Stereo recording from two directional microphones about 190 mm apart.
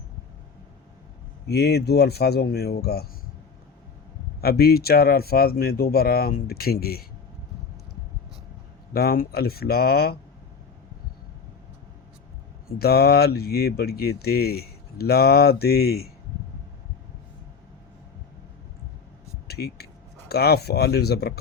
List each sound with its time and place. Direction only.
1.5 s speech: 60° left (ahead or behind)
4.4 s speech: 55° left (ahead or behind)
8.9 s speech: 55° left (ahead or behind)
12.6 s speech: 55° left (ahead or behind)
19.5 s speech: 55° left (ahead or behind)